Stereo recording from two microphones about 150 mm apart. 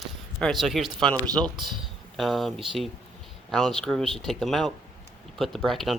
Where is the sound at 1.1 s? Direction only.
25° right (ahead or behind).